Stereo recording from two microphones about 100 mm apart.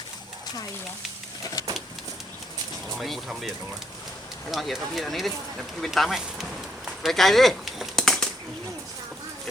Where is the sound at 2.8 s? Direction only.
Centre (ahead or behind).